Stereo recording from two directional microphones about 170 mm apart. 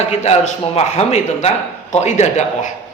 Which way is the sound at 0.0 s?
40° left (ahead or behind).